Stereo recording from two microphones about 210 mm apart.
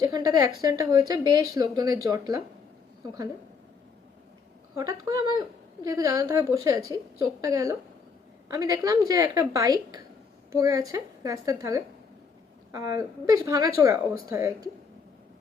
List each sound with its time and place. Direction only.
0.0 s speech: 15° right (ahead or behind)
4.7 s speech: 15° right (ahead or behind)